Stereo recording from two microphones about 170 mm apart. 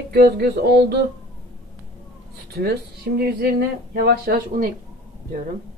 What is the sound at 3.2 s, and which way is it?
Speech, 65° right (ahead or behind).